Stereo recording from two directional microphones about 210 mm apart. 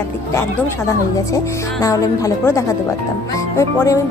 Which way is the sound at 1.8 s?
15° left (ahead or behind).